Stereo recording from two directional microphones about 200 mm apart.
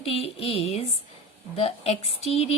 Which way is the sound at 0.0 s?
30° left (ahead or behind).